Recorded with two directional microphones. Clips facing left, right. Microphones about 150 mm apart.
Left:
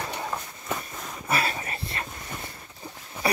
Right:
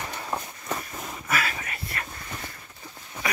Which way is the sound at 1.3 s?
30° left (ahead or behind).